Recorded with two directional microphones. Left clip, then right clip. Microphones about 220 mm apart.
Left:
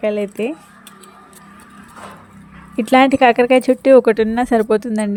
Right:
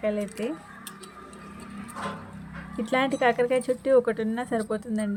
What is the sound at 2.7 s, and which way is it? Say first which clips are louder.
Speech: left 13 dB; 40° left (ahead or behind).